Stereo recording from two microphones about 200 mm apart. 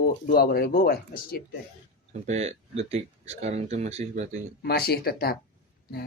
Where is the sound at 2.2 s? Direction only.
35° right (ahead or behind).